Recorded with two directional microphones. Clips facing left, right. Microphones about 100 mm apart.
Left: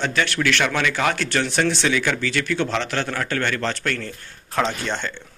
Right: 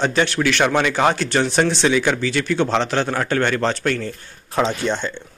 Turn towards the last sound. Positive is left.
turn(degrees=-15)  # may be behind; listen again after turning